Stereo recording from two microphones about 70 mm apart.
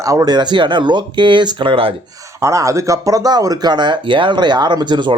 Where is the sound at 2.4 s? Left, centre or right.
Right.